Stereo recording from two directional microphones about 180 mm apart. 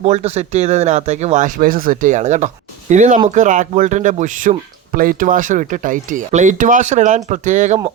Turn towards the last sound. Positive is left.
turn(degrees=-45)  # may be behind; listen again after turning